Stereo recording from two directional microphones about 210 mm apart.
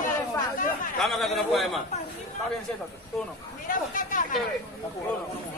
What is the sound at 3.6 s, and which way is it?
Speech, 40° left (ahead or behind).